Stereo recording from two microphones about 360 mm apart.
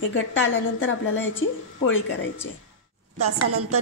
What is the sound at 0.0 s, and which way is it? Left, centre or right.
A woman's voice, left.